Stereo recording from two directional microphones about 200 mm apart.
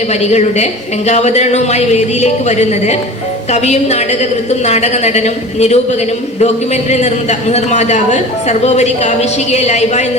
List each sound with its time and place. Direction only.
0.1 s a woman's voice: 35° left (ahead or behind)
6.9 s a woman's voice: 35° left (ahead or behind)